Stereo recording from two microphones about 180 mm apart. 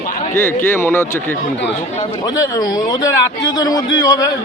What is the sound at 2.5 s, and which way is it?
A man's voice, 20° left (ahead or behind).